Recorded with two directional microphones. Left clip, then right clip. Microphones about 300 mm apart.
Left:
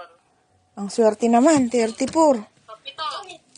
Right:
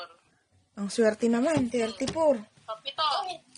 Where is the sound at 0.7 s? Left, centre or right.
Centre.